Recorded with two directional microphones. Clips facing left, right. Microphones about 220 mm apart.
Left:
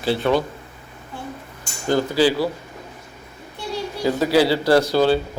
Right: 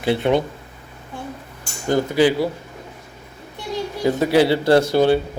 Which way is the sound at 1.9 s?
20° right (ahead or behind).